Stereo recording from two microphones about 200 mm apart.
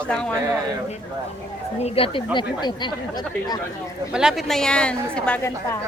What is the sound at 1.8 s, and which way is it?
Speech, 30° left (ahead or behind).